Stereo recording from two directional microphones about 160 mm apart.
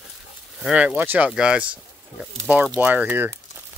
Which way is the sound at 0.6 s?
5° right (ahead or behind).